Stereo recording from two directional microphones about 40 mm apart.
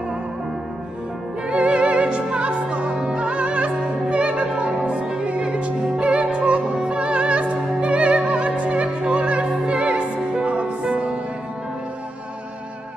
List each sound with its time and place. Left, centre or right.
1.6 s music: right